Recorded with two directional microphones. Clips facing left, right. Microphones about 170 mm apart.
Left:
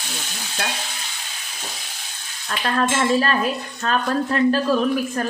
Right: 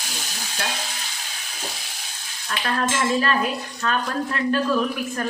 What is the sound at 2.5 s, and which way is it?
Cutlery, 35° left (ahead or behind).